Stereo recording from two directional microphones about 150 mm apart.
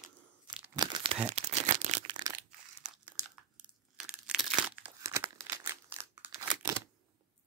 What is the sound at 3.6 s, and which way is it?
Crumpling, 5° right (ahead or behind).